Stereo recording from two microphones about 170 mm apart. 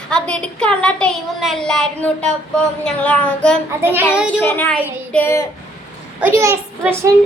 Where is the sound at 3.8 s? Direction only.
10° right (ahead or behind).